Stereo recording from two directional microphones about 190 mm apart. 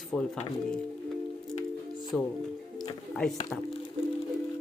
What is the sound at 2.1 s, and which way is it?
Speech, 5° left (ahead or behind).